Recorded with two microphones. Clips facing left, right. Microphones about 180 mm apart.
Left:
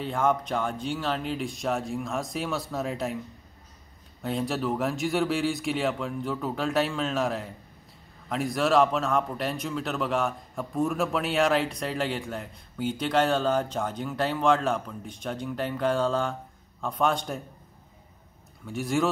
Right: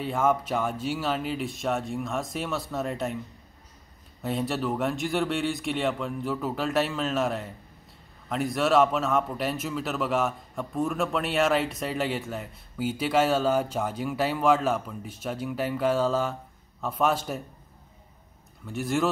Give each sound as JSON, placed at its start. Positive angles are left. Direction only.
{"t": 0.0, "sound": "speech", "side_deg": -5}
{"t": 4.2, "sound": "speech", "side_deg": 0}
{"t": 18.7, "sound": "speech", "side_deg": 0}